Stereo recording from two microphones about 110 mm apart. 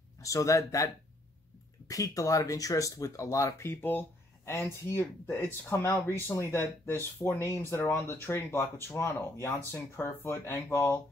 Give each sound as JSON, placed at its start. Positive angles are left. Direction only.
{"t": 0.2, "sound": "speech", "side_deg": 30}